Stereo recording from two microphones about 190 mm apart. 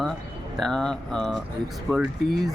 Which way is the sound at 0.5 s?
Centre (ahead or behind).